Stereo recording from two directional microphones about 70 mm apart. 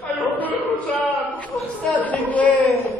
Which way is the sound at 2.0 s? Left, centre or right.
Left.